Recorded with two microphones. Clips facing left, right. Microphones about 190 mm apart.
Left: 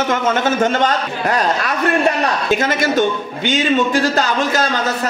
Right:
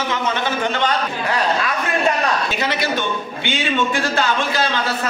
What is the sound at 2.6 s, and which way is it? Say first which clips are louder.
A man's voice: left 6 dB; 45° left (ahead or behind).